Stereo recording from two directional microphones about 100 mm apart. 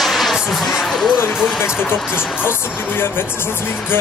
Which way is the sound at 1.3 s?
5° right (ahead or behind).